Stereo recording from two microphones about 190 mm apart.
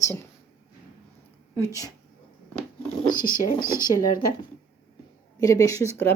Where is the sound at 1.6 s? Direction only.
15° left (ahead or behind).